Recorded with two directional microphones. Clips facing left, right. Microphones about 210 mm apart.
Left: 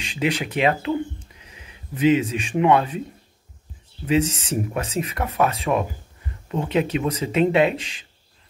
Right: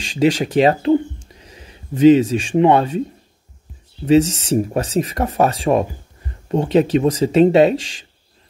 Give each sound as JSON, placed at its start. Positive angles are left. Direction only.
{"t": 0.0, "sound": "speech", "side_deg": -30}
{"t": 4.0, "sound": "speech", "side_deg": -40}